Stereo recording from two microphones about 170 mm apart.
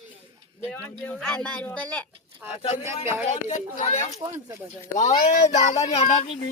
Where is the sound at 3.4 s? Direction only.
45° left (ahead or behind).